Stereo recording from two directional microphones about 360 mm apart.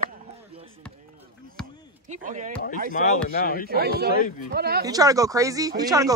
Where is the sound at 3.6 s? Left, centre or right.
Right.